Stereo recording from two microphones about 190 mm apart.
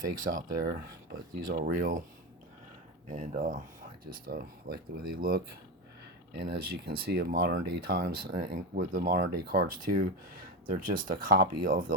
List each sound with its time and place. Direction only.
0.0 s speech: 45° right (ahead or behind)
3.1 s speech: 45° right (ahead or behind)